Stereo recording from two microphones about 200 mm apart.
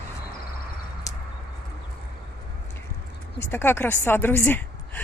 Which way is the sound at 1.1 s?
15° left (ahead or behind).